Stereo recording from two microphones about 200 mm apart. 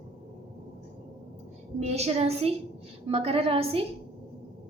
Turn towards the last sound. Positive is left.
turn(degrees=-30)  # may be behind; listen again after turning